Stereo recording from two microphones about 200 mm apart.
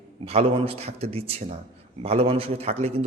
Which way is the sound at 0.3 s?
30° right (ahead or behind).